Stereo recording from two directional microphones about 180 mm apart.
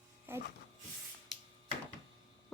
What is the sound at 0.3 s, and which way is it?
Music, 10° right (ahead or behind).